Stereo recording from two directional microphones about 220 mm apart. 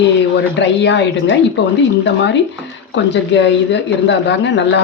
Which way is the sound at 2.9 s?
55° left (ahead or behind).